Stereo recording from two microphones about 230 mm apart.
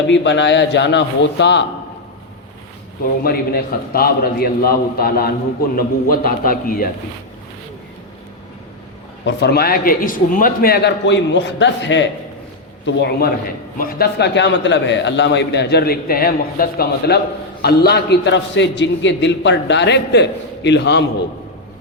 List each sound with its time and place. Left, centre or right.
0.1 s a man's voice: left
3.2 s a man's voice: left
9.2 s a man's voice: left